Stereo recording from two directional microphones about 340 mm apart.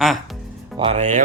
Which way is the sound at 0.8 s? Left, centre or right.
Centre.